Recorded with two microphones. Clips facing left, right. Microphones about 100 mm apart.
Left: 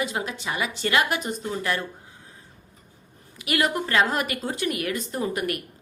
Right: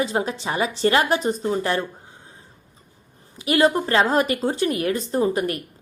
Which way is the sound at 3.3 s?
30° right (ahead or behind).